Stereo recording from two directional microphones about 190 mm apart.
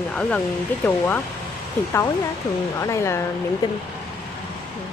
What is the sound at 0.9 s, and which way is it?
Speech, 10° left (ahead or behind).